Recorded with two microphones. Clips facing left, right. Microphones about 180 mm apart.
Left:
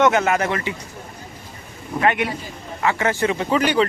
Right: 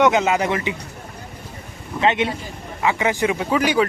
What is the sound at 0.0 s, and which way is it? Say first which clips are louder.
Speech: even; 15° right (ahead or behind).